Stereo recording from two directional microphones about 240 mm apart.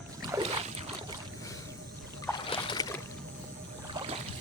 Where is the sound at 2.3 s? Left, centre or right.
Centre.